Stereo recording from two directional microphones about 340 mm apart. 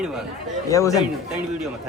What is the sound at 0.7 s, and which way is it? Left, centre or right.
Speech, centre.